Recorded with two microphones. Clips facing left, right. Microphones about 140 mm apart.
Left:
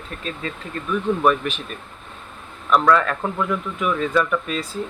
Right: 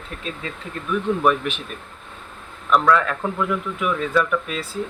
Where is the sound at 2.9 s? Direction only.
5° right (ahead or behind).